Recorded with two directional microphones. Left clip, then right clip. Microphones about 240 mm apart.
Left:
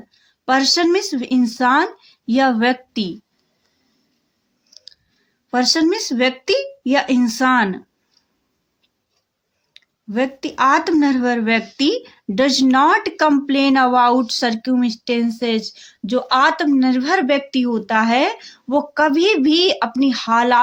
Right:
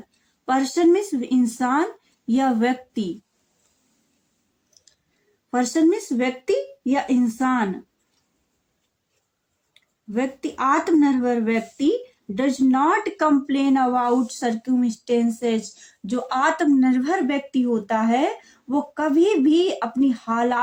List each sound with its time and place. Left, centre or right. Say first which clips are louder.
0.4 s speech: left 4 dB; left
5.5 s speech: left 3 dB; left
10.1 s speech: left 5 dB; left